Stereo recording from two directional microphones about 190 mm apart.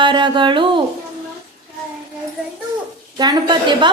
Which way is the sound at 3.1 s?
20° right (ahead or behind).